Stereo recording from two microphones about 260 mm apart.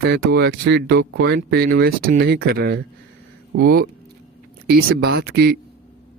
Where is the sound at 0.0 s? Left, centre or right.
Right.